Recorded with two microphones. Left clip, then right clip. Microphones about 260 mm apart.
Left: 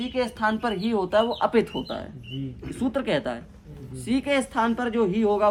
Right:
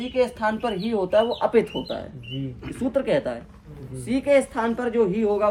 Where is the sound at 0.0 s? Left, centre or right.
Centre.